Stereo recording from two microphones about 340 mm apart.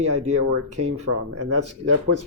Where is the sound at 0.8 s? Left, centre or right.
Right.